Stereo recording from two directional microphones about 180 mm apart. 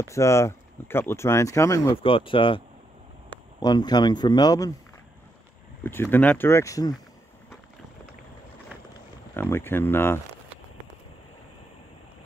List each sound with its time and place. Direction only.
0.0 s speech: 15° left (ahead or behind)
2.0 s speech: 30° left (ahead or behind)
5.9 s speech: 10° left (ahead or behind)
9.3 s speech: 10° left (ahead or behind)